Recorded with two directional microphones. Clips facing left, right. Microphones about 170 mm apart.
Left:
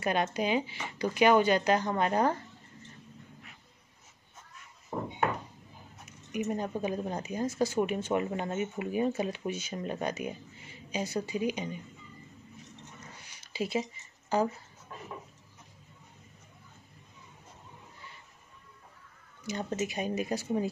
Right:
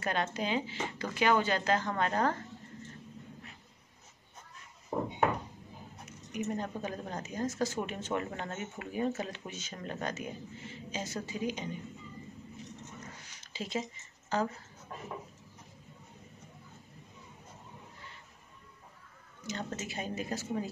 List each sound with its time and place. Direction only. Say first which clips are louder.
0.0 s a woman's voice: left 4 dB; 15° left (ahead or behind)
6.3 s a woman's voice: left 3 dB; 10° left (ahead or behind)
13.2 s a sound: left 9 dB; 10° left (ahead or behind)
14.3 s speech: left 4 dB; 10° left (ahead or behind)
19.4 s a woman's voice: left 6 dB; 15° left (ahead or behind)